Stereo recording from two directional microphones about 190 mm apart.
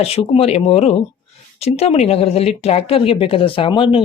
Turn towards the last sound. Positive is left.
turn(degrees=25)  # may be behind; listen again after turning